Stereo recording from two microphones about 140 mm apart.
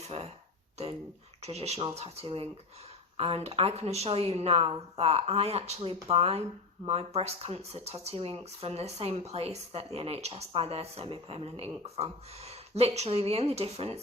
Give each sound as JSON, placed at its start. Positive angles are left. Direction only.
{"t": 1.4, "sound": "speech", "side_deg": -50}